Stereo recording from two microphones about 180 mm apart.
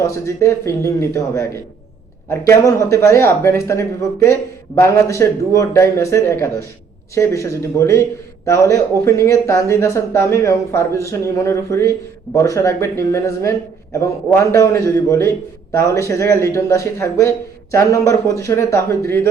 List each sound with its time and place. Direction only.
0.0 s speech: 15° left (ahead or behind)
2.6 s speech: 15° left (ahead or behind)